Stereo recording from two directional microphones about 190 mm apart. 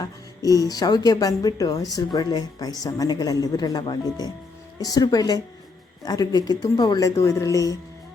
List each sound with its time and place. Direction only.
0.0 s speech: 20° left (ahead or behind)